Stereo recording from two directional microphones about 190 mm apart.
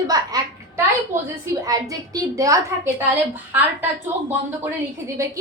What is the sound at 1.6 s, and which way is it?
A woman's voice, 20° right (ahead or behind).